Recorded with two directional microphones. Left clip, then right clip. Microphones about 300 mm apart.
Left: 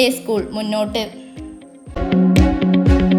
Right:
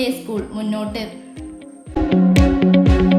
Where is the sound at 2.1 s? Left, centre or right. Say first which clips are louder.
Left 1 dB; centre.